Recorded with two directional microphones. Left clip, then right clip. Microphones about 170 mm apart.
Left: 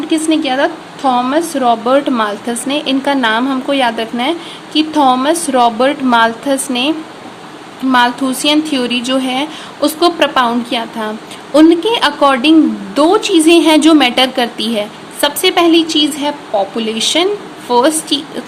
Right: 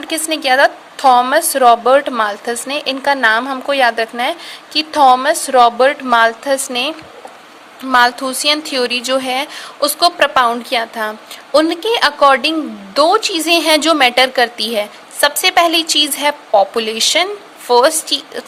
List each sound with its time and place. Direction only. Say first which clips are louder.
0.1 s a woman's voice: even; 50° right (ahead or behind)